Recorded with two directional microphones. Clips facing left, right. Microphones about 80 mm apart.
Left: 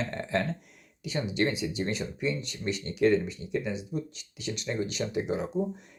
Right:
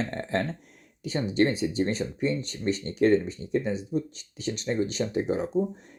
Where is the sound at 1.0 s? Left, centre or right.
Right.